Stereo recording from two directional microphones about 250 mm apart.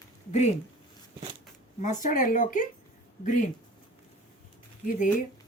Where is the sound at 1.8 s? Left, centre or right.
Left.